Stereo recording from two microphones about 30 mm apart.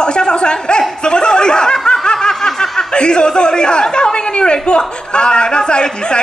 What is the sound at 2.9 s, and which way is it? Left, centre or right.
A man's voice, left.